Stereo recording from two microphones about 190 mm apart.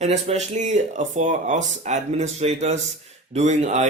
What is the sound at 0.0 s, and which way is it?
Speech, 35° right (ahead or behind).